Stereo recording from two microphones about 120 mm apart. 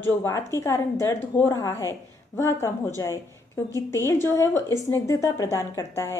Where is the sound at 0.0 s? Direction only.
20° left (ahead or behind).